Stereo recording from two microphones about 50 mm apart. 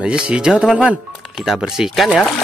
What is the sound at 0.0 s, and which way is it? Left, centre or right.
Speech, centre.